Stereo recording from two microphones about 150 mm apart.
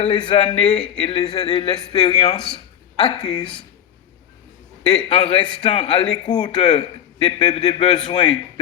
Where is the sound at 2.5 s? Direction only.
40° left (ahead or behind).